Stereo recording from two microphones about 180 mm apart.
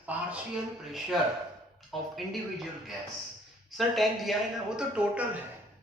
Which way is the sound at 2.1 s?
Centre (ahead or behind).